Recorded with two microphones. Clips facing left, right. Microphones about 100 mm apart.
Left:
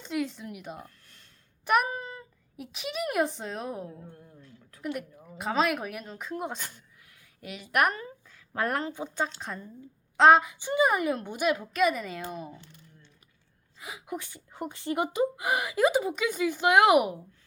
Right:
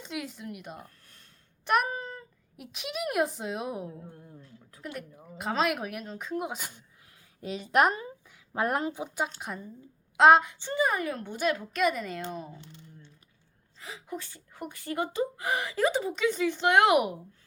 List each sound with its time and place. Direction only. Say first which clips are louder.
0.0 s speech: left 5 dB; centre (ahead or behind)
4.4 s a sound: right 1 dB; 30° right (ahead or behind)
5.2 s speech: left 1 dB; centre (ahead or behind)
7.4 s speech: right 2 dB; 30° right (ahead or behind); by 10.6 s centre (ahead or behind)
10.6 s speech: left 3 dB; 15° left (ahead or behind)
12.5 s speech: right 2 dB; 20° right (ahead or behind)
13.7 s speech: left 2 dB; 10° left (ahead or behind)